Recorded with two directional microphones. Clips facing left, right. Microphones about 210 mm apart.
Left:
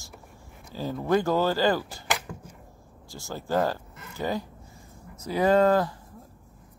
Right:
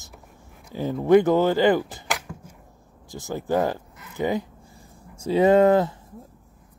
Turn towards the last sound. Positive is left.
turn(degrees=-20)  # may be behind; listen again after turning